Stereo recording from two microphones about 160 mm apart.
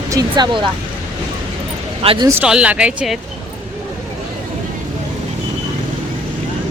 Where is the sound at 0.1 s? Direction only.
25° right (ahead or behind).